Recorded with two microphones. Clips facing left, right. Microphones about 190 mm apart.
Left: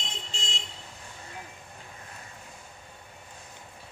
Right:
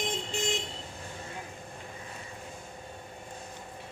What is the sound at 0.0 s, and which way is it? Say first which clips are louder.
Vehicle: right 9 dB; 55° right (ahead or behind).